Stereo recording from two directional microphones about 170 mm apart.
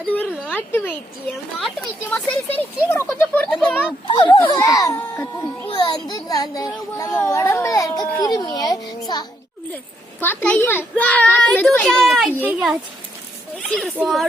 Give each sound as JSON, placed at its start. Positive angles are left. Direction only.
{"t": 0.1, "sound": "a sound", "side_deg": 10}
{"t": 1.6, "sound": "a child's voice", "side_deg": 0}
{"t": 2.6, "sound": "a child's voice", "side_deg": 15}
{"t": 4.0, "sound": "a child's voice", "side_deg": 30}
{"t": 5.6, "sound": "a child's voice", "side_deg": 25}
{"t": 10.2, "sound": "a child's voice", "side_deg": 10}
{"t": 13.6, "sound": "a child's voice", "side_deg": 0}